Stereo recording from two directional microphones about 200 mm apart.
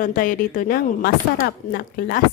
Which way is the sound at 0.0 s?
40° left (ahead or behind).